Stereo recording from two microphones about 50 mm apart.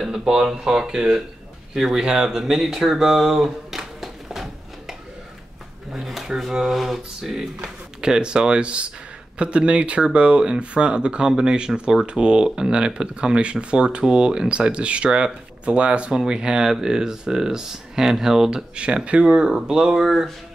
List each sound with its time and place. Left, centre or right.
0.0 s speech: centre
1.7 s a sound: centre
5.9 s speech: centre; by 19.4 s right
19.4 s speech: centre